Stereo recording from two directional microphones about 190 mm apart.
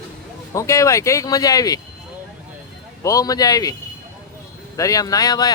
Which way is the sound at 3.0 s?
20° left (ahead or behind).